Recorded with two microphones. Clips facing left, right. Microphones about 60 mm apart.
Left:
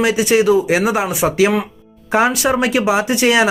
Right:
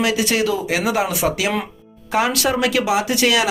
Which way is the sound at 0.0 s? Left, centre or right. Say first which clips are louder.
Left 5 dB; left.